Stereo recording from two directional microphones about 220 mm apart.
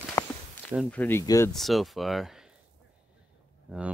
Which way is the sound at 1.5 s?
Centre (ahead or behind).